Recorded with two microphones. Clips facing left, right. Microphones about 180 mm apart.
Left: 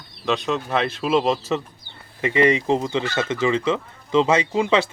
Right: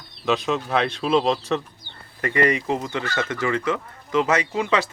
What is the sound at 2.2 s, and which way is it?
Speech, 20° left (ahead or behind).